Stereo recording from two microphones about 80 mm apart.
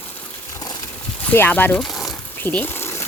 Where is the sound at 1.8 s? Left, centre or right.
Centre.